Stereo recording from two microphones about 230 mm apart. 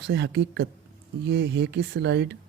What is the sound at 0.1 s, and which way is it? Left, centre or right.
Speech, right.